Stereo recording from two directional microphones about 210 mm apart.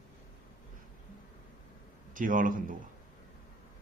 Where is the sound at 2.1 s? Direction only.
40° right (ahead or behind).